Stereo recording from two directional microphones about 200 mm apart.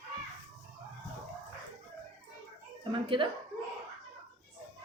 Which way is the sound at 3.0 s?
25° right (ahead or behind).